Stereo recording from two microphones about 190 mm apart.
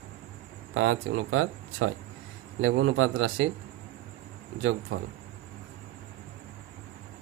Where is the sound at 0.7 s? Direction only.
90° right.